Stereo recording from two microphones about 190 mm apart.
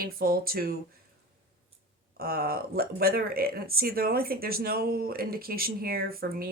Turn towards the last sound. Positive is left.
turn(degrees=-50)  # may be behind; listen again after turning